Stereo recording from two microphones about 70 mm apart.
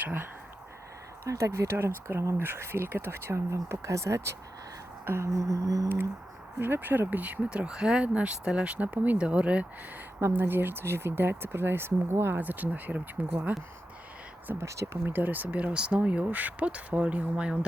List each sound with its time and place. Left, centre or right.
0.0 s speech: right
1.3 s speech: right
5.0 s music: right
6.6 s speech: right
10.2 s speech: right
14.6 s music: right
15.0 s speech: right